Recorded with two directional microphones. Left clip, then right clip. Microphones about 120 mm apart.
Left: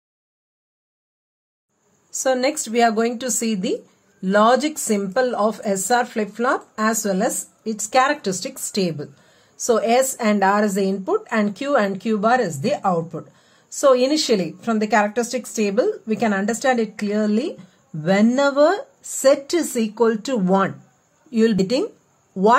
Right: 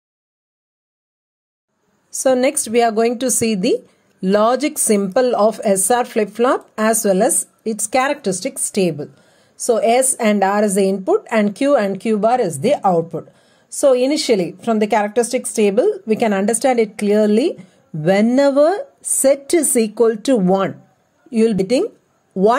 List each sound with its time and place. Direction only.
2.1 s a woman's voice: 40° right (ahead or behind)
8.1 s speech: 20° right (ahead or behind); by 20.7 s 40° right (ahead or behind)
21.3 s speech: 25° right (ahead or behind)
22.3 s speech: 40° right (ahead or behind)